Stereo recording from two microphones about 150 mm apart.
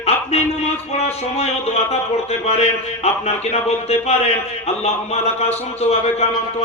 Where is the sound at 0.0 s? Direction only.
45° left (ahead or behind).